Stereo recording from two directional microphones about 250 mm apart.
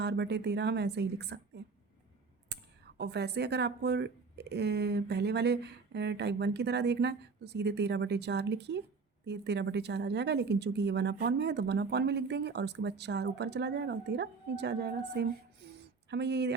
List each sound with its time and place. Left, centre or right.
0.0 s speech: right
2.5 s clicking: right
3.0 s a woman's voice: right
15.6 s a sound: right
16.0 s a woman's voice: right